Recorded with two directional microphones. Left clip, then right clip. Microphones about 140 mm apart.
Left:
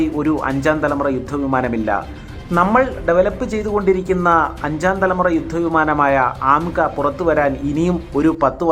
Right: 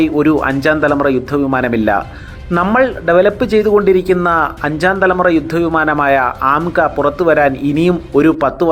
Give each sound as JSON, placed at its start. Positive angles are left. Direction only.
{"t": 0.0, "sound": "speech", "side_deg": -25}